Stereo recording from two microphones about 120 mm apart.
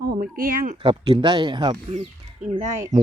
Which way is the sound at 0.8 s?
45° right (ahead or behind).